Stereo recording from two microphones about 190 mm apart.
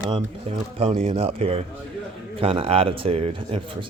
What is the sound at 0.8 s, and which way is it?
A man's voice, 30° right (ahead or behind).